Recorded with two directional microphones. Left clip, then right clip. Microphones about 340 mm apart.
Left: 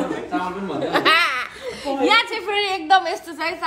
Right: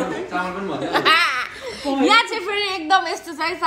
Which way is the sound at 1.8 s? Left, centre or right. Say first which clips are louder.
Right 1 dB; centre.